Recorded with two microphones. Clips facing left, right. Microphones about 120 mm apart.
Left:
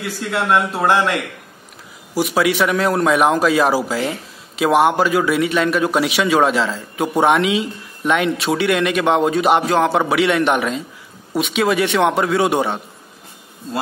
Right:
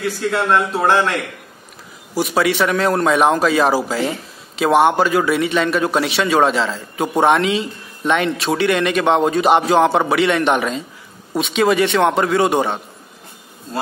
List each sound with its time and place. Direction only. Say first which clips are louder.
0.0 s a man's voice: right 3 dB; 5° left (ahead or behind)
2.1 s a man's voice: even; 5° left (ahead or behind)